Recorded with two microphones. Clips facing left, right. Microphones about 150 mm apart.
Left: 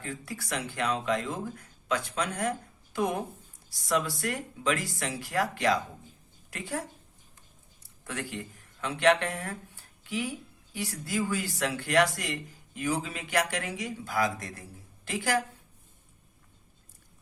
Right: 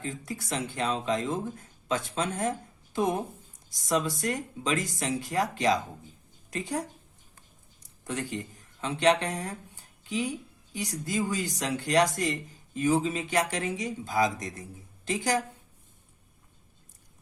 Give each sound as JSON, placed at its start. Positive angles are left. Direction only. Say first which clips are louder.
{"t": 0.0, "sound": "speech", "louder": "right 2 dB", "side_deg": -20}